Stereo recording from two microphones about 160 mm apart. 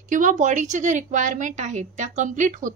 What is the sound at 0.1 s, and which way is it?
A woman's voice, 50° right (ahead or behind).